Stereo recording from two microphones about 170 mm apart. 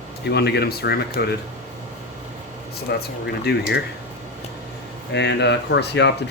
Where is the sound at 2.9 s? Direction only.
75° left (ahead or behind).